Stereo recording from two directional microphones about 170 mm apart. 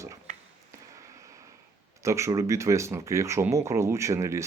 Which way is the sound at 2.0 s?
15° right (ahead or behind).